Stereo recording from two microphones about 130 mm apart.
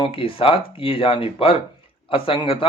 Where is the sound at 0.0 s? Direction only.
45° left (ahead or behind).